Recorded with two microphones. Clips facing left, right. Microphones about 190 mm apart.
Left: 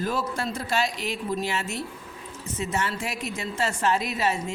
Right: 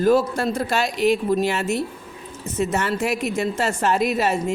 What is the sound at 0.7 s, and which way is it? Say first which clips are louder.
A woman's voice: right 8 dB; 65° right (ahead or behind).